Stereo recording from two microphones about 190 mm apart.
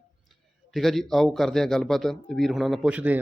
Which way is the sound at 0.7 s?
Centre (ahead or behind).